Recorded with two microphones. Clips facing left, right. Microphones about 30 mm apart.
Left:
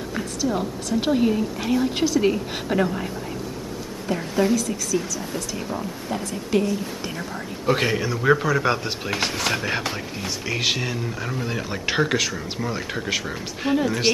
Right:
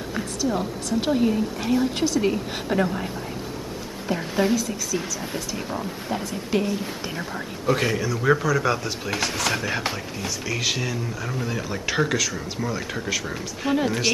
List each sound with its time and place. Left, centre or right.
0.1 s a woman's voice: centre
4.1 s a woman's voice: centre
7.6 s speech: centre
8.2 s speech: centre
8.5 s speech: left
9.2 s speech: centre
13.7 s a woman's voice: centre